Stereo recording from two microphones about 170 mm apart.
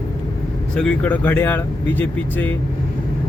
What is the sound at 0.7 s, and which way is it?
Speech, 5° left (ahead or behind).